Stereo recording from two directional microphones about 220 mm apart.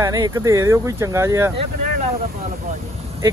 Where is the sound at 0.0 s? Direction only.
15° right (ahead or behind).